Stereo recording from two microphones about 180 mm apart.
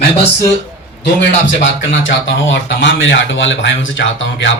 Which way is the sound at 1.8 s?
90° left.